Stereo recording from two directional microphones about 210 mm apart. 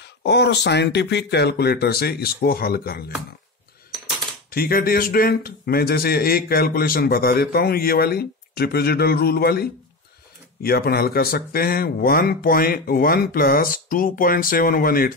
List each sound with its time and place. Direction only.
0.0 s speech: 55° left (ahead or behind)
4.5 s speech: 45° left (ahead or behind)